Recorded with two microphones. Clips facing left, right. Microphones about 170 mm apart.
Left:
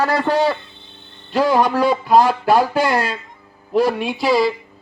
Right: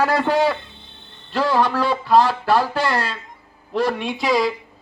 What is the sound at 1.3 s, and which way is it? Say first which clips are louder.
A man's voice: left 3 dB; 15° left (ahead or behind).